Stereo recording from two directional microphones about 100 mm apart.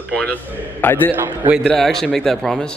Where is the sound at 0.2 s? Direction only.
15° left (ahead or behind).